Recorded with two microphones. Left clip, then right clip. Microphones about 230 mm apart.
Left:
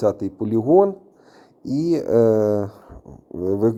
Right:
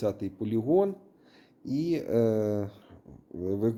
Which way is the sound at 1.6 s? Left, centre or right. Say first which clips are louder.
Left 9 dB; left.